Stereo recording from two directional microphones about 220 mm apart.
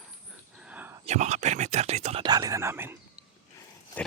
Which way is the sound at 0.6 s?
5° right (ahead or behind).